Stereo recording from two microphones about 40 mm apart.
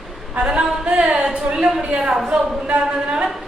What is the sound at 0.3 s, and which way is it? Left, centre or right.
Speech, right.